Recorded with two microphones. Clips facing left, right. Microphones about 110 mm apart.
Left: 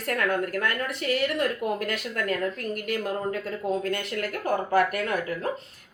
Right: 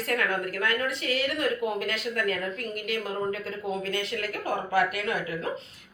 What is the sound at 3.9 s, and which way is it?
A woman's voice, 45° left (ahead or behind).